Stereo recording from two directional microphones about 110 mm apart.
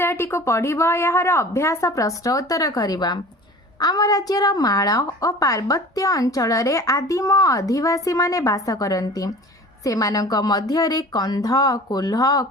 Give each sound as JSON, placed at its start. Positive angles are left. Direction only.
{"t": 0.0, "sound": "a woman's voice", "side_deg": 20}